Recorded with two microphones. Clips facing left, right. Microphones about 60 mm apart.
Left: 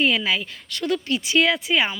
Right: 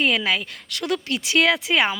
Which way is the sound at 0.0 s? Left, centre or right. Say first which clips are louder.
Even; right.